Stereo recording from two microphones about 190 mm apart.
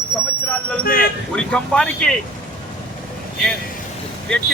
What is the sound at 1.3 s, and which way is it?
Speech, 5° left (ahead or behind).